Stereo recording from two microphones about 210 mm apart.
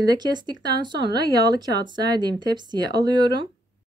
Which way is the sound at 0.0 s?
20° right (ahead or behind).